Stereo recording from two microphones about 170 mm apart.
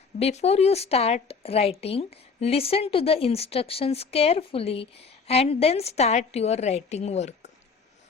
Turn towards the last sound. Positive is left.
turn(degrees=40)  # may be behind; listen again after turning